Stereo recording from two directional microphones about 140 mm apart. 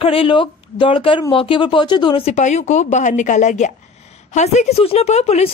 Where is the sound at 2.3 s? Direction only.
55° left (ahead or behind).